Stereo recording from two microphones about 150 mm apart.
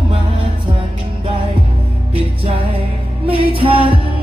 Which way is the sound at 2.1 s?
40° right (ahead or behind).